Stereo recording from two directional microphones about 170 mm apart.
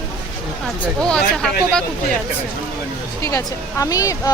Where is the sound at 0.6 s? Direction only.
Centre (ahead or behind).